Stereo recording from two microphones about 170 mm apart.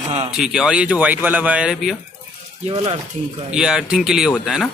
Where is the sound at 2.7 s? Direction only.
30° right (ahead or behind).